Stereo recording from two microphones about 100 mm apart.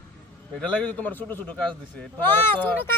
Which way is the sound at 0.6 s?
10° left (ahead or behind).